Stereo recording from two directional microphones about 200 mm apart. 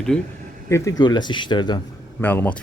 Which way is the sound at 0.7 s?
20° left (ahead or behind).